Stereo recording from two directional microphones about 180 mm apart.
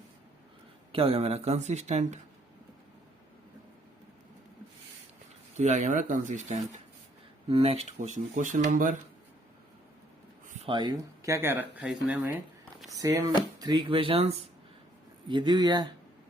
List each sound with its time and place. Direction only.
0.9 s speech: 30° right (ahead or behind)
5.5 s speech: 40° right (ahead or behind)
7.4 s speech: 30° right (ahead or behind); by 9.0 s 45° right (ahead or behind)
10.5 s speech: 30° right (ahead or behind); by 12.2 s 5° right (ahead or behind)
12.9 s speech: 20° right (ahead or behind)